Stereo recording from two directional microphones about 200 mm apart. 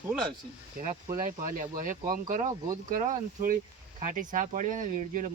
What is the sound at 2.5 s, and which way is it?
Speech, 15° right (ahead or behind).